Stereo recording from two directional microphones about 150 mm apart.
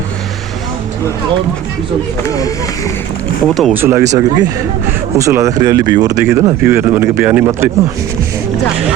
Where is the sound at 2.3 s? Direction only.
25° left (ahead or behind).